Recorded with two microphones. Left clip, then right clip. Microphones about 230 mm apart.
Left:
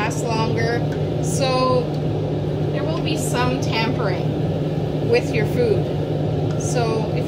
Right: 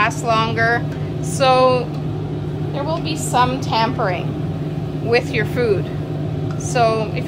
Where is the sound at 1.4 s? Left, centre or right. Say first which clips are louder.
Right 7 dB; right.